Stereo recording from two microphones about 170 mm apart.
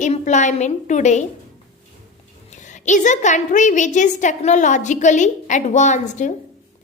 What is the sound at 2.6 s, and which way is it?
A woman's voice, 45° left (ahead or behind).